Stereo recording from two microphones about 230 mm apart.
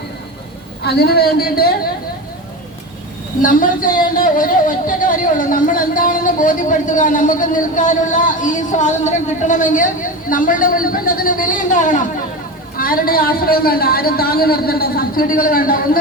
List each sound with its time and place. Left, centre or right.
0.8 s a woman's voice: left
3.4 s a man's voice: left